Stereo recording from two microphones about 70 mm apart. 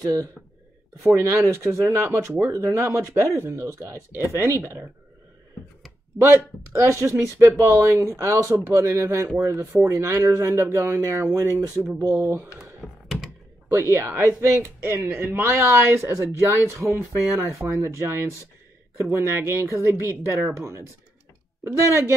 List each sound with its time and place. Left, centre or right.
1.1 s speech: right
4.6 s speech: right
6.1 s speech: right
8.5 s speech: right
8.8 s speech: right
12.2 s speech: right
12.8 s computer keyboard: centre
13.7 s speech: right